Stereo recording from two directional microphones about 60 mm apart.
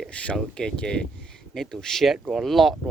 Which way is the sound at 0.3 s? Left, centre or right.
Centre.